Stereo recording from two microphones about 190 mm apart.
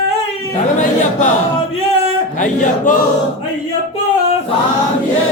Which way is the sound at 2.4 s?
40° left (ahead or behind).